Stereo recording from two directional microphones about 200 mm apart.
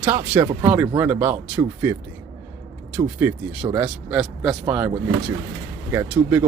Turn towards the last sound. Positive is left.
turn(degrees=-10)  # may be behind; listen again after turning